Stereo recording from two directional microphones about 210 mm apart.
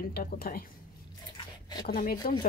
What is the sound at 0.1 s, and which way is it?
Speech, 45° left (ahead or behind).